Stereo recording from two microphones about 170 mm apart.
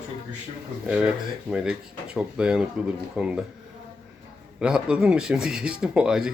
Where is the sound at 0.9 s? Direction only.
5° right (ahead or behind).